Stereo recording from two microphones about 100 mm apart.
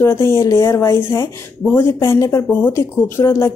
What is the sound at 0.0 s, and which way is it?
A woman's voice, 25° left (ahead or behind).